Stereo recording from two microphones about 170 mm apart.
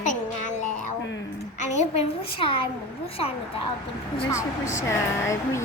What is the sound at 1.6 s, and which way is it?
Speech, 45° left (ahead or behind).